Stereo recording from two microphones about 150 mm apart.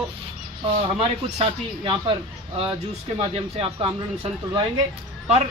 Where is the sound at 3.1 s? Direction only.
35° right (ahead or behind).